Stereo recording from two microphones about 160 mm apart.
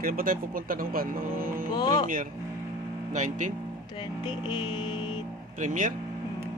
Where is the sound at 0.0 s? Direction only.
60° right (ahead or behind).